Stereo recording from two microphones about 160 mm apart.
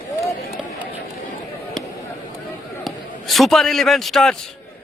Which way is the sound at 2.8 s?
Centre (ahead or behind).